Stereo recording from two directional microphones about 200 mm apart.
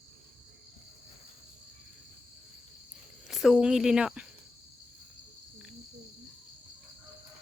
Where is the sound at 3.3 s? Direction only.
Centre (ahead or behind).